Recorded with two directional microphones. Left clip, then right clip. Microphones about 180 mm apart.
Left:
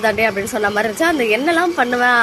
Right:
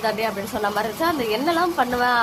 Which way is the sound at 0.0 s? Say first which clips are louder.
Left 7 dB; 20° left (ahead or behind).